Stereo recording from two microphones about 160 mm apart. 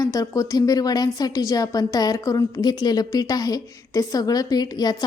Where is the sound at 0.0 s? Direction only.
20° left (ahead or behind).